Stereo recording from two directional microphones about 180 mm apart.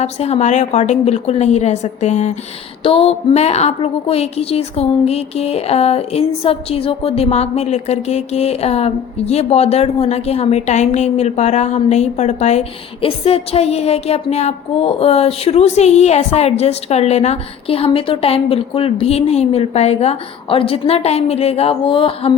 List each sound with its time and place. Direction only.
0.0 s a woman's voice: 35° left (ahead or behind)